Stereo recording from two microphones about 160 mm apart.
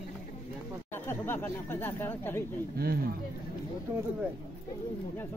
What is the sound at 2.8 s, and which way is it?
Speech, 75° right (ahead or behind).